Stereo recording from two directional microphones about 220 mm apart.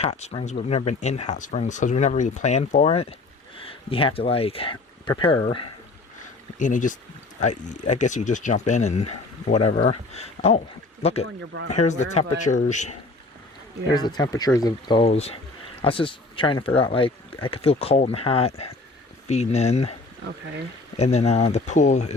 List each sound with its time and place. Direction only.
0.0 s speech: 30° left (ahead or behind)
6.6 s speech: 35° left (ahead or behind)
11.5 s speech: 60° right (ahead or behind)
11.9 s speech: 30° left (ahead or behind)
13.9 s speech: 20° left (ahead or behind)